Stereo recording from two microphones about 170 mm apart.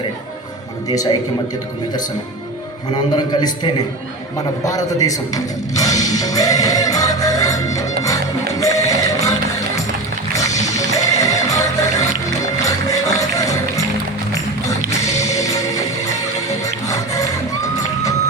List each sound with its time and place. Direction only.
0.9 s a man's voice: 20° left (ahead or behind)
2.9 s a man's voice: 25° left (ahead or behind)
8.4 s music: 20° left (ahead or behind)
10.3 s music: 20° left (ahead or behind)
14.8 s music: 20° left (ahead or behind)